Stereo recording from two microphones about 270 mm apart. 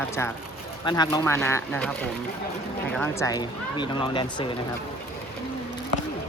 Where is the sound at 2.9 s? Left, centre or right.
Centre.